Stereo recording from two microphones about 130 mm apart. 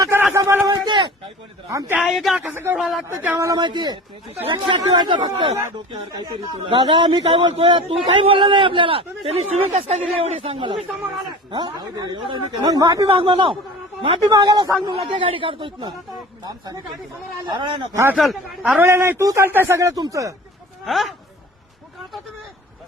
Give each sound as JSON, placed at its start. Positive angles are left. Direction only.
{"t": 0.0, "sound": "a sound", "side_deg": -25}
{"t": 0.7, "sound": "a sound", "side_deg": -35}
{"t": 2.0, "sound": "a man's voice", "side_deg": 0}
{"t": 2.5, "sound": "speech", "side_deg": -15}
{"t": 2.7, "sound": "a man's voice", "side_deg": 0}
{"t": 3.1, "sound": "speech", "side_deg": -15}
{"t": 3.3, "sound": "speech", "side_deg": -25}
{"t": 6.7, "sound": "a man's voice", "side_deg": -35}
{"t": 13.1, "sound": "speech", "side_deg": -40}
{"t": 16.4, "sound": "speech", "side_deg": -30}
{"t": 18.2, "sound": "a man's voice", "side_deg": 0}
{"t": 18.8, "sound": "speech", "side_deg": -20}
{"t": 20.8, "sound": "speech", "side_deg": 0}